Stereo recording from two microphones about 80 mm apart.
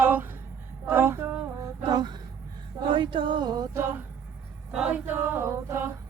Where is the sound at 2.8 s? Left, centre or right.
Right.